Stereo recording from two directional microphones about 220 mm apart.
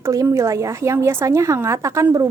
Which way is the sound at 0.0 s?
15° right (ahead or behind).